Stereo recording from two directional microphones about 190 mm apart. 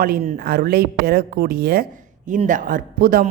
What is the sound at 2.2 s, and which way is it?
A woman's voice, 40° right (ahead or behind).